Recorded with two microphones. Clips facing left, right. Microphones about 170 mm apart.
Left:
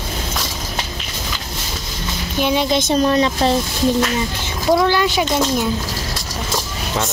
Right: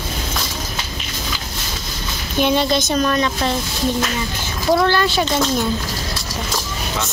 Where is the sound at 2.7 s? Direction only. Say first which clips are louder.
Left 3 dB; 30° left (ahead or behind).